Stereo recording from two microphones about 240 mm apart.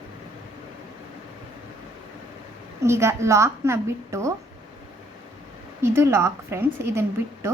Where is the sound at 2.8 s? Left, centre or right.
Centre.